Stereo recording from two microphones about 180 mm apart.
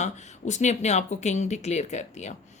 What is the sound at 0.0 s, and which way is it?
Speech, 40° left (ahead or behind).